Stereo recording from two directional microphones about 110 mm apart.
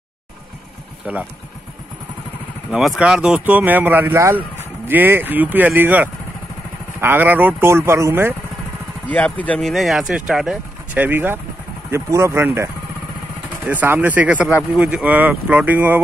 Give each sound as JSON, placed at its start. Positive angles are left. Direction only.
{"t": 1.0, "sound": "speech", "side_deg": -10}
{"t": 3.0, "sound": "speech", "side_deg": -5}
{"t": 9.1, "sound": "speech", "side_deg": 15}
{"t": 9.6, "sound": "speech", "side_deg": 0}
{"t": 11.0, "sound": "speech", "side_deg": -20}